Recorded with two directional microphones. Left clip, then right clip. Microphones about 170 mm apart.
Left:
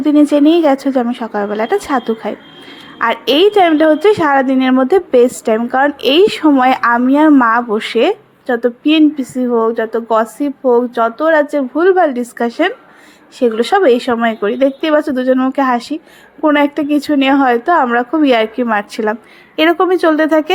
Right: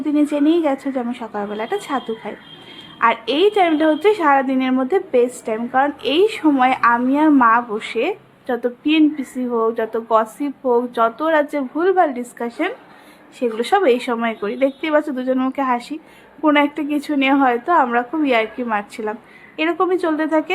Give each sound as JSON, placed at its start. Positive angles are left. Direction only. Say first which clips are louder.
{"t": 0.0, "sound": "a woman's voice", "louder": "left 8 dB", "side_deg": 40}
{"t": 8.4, "sound": "a woman's voice", "louder": "left 6 dB", "side_deg": 25}